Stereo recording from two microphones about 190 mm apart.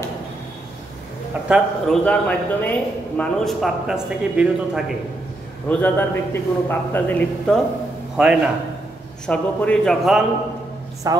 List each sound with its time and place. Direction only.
1.5 s speech: 5° left (ahead or behind)
5.7 s a man's voice: 10° left (ahead or behind)
8.2 s speech: 5° right (ahead or behind)
11.1 s a woman's voice: 20° right (ahead or behind)